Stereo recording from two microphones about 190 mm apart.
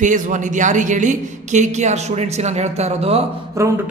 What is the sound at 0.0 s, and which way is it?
A woman's voice, 40° right (ahead or behind).